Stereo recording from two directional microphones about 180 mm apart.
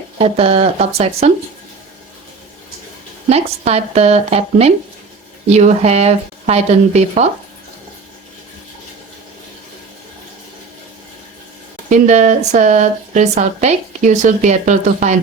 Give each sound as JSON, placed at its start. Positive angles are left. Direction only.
{"t": 0.2, "sound": "speech", "side_deg": -35}
{"t": 3.2, "sound": "speech", "side_deg": -35}
{"t": 11.9, "sound": "speech", "side_deg": -40}